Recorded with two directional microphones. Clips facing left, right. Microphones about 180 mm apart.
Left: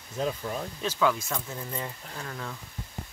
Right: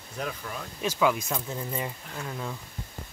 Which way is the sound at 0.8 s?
10° right (ahead or behind).